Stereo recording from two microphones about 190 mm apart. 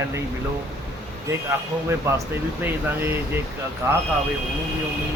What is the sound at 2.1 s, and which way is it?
Speech, 15° right (ahead or behind).